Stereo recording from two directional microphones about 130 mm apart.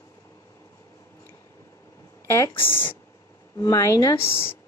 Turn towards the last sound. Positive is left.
turn(degrees=20)  # may be behind; listen again after turning